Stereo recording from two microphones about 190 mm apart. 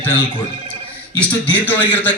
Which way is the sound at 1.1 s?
10° left (ahead or behind).